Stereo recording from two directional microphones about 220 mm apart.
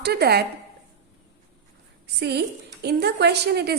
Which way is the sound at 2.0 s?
50° right (ahead or behind).